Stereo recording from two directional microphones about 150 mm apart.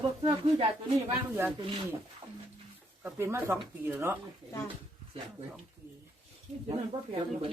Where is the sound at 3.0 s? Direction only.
15° right (ahead or behind).